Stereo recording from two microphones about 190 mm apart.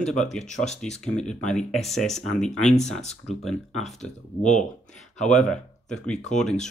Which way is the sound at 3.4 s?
Centre (ahead or behind).